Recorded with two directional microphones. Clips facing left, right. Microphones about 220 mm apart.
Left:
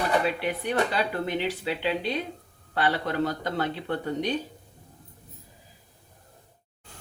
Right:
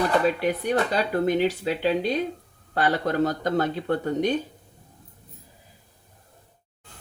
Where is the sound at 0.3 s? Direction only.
40° right (ahead or behind).